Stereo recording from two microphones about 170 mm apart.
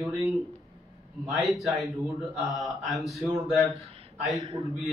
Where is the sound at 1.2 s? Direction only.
Centre (ahead or behind).